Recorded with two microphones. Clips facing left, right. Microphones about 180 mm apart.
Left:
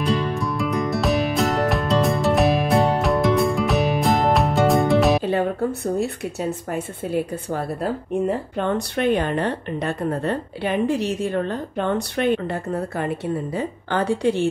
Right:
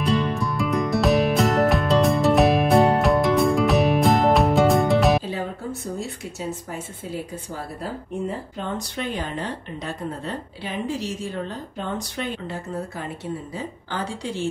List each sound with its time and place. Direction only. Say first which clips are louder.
0.0 s music: even; centre (ahead or behind)
5.2 s speech: left 8 dB; 65° left (ahead or behind)